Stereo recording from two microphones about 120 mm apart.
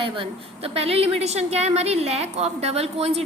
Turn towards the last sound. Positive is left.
turn(degrees=-60)  # may be behind; listen again after turning